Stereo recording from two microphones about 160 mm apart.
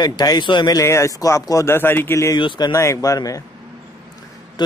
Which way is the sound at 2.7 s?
20° left (ahead or behind).